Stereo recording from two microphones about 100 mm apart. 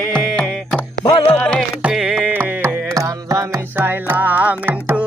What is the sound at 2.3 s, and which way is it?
Music, 20° right (ahead or behind).